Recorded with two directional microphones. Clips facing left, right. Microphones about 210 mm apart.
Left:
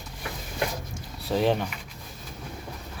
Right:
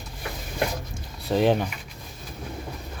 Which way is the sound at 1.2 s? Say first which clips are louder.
Right 3 dB; centre (ahead or behind).